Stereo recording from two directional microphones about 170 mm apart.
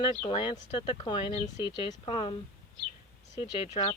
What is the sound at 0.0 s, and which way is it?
Speech, 30° left (ahead or behind).